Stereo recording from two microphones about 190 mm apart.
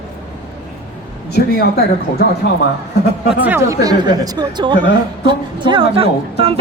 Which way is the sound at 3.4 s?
10° right (ahead or behind).